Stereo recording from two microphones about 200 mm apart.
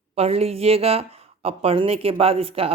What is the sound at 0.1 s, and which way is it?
Speech, 30° right (ahead or behind).